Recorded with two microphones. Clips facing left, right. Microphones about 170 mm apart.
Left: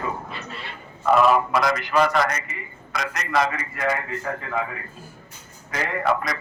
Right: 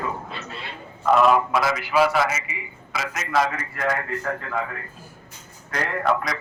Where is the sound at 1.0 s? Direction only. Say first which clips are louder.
Even; centre (ahead or behind).